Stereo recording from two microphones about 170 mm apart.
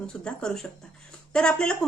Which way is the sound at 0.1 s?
5° left (ahead or behind).